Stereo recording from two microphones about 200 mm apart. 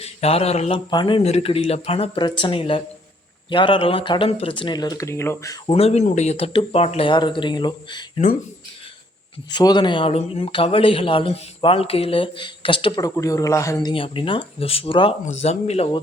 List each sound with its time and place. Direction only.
0.0 s a man's voice: 30° left (ahead or behind); by 5.5 s 15° left (ahead or behind)
5.6 s a man's voice: 30° left (ahead or behind)
9.5 s a man's voice: 20° left (ahead or behind)